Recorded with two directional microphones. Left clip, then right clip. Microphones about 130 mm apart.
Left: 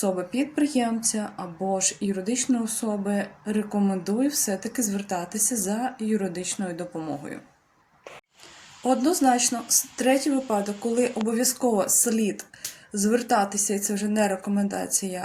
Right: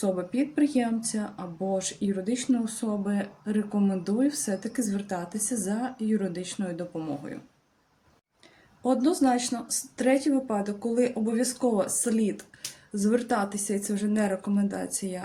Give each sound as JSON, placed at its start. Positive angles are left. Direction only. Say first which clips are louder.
{"t": 0.0, "sound": "speech", "louder": "left 2 dB", "side_deg": -15}
{"t": 8.8, "sound": "speech", "louder": "left 3 dB", "side_deg": -15}